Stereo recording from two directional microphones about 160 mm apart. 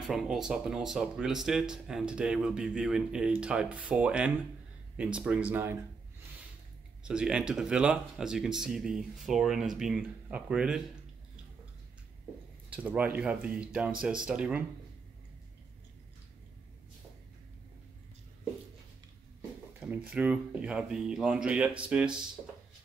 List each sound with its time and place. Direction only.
0.0 s speech: centre (ahead or behind)
7.1 s speech: 5° right (ahead or behind)
12.6 s speech: 10° right (ahead or behind)
20.1 s speech: 10° right (ahead or behind)